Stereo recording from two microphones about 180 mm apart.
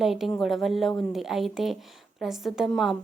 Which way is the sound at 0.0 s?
Centre (ahead or behind).